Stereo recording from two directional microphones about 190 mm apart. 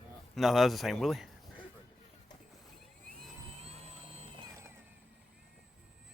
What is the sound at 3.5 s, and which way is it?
Vehicle, 35° right (ahead or behind).